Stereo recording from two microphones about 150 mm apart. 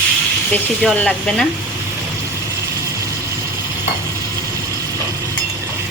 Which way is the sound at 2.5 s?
20° right (ahead or behind).